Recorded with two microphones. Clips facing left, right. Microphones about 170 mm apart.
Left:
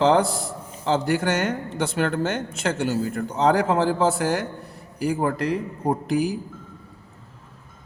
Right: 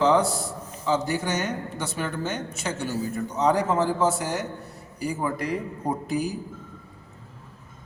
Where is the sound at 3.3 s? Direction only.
75° left (ahead or behind).